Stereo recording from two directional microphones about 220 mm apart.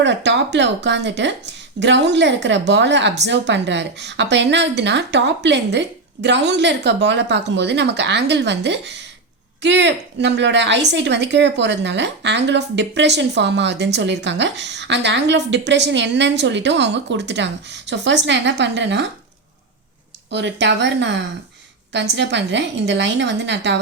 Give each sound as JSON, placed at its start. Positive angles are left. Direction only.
{"t": 0.0, "sound": "a woman's voice", "side_deg": -55}
{"t": 20.3, "sound": "a woman's voice", "side_deg": -50}